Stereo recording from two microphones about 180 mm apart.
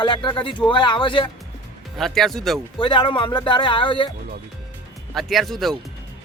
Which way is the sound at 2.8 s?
25° left (ahead or behind).